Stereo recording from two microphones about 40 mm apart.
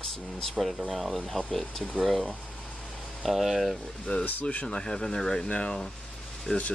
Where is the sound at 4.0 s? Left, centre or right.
Left.